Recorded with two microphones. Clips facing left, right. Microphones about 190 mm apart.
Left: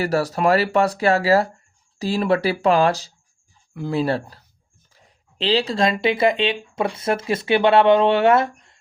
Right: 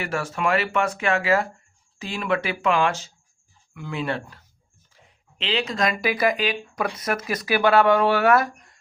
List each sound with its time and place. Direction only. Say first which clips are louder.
0.0 s speech: left 6 dB; 35° left (ahead or behind)